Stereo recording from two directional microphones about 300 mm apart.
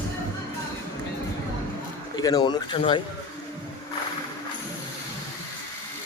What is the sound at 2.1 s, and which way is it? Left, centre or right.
Speech, centre.